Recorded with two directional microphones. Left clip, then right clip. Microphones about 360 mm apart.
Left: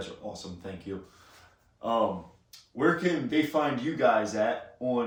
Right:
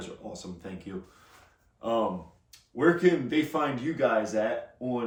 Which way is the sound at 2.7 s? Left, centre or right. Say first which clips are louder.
Right 3 dB; centre.